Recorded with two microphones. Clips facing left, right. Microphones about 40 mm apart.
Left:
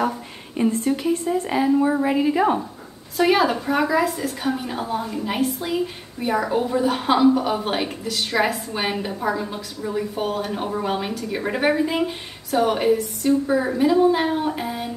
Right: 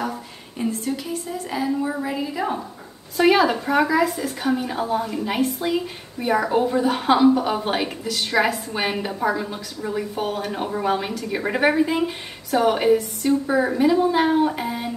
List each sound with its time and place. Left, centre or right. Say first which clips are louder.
0.7 s a woman's voice: left 5 dB; left
3.2 s a woman's voice: right 1 dB; centre